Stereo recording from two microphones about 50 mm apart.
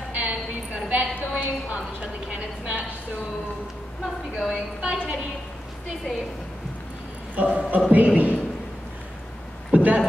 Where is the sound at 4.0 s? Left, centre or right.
Centre.